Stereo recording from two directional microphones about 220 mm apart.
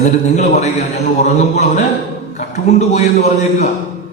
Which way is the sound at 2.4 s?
30° left (ahead or behind).